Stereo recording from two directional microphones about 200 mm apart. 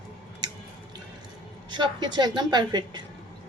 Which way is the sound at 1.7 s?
20° right (ahead or behind).